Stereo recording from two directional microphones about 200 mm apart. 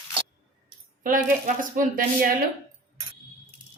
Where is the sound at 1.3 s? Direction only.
40° right (ahead or behind).